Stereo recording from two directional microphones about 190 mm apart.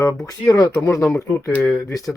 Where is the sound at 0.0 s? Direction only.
15° left (ahead or behind).